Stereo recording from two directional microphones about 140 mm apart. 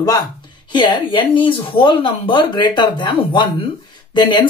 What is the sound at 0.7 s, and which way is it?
Speech, 35° left (ahead or behind).